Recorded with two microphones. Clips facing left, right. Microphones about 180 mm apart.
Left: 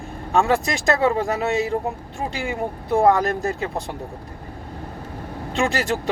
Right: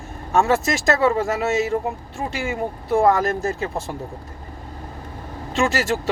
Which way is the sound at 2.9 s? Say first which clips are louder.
Even; 15° left (ahead or behind).